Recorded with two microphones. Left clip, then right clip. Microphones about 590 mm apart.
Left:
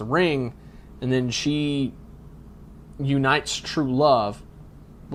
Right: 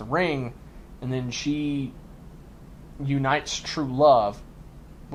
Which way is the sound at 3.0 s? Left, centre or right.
Left.